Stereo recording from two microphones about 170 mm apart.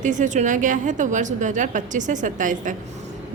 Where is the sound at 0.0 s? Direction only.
45° right (ahead or behind).